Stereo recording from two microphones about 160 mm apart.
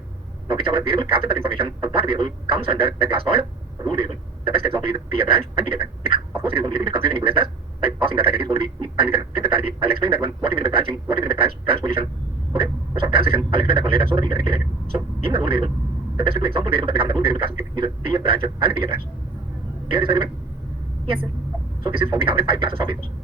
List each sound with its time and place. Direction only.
0.4 s a man's voice: 35° right (ahead or behind)
13.1 s a man's voice: 35° right (ahead or behind)
22.1 s a man's voice: 35° right (ahead or behind)